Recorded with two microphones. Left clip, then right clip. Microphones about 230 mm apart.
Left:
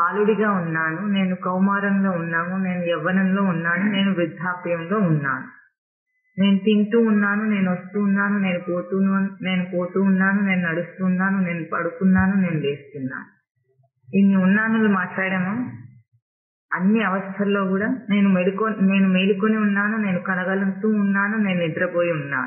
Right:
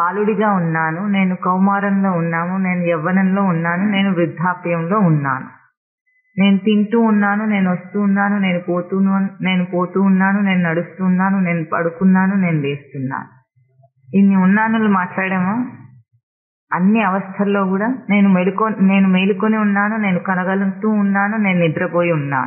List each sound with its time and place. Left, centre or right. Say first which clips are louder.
0.0 s a man's voice: right 3 dB; right
6.3 s a man's voice: right 4 dB; right
14.5 s a man's voice: right 4 dB; right
16.7 s a man's voice: right 5 dB; right